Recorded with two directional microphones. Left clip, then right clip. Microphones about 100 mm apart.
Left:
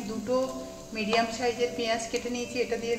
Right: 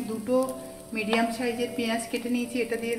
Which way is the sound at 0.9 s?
55° right (ahead or behind).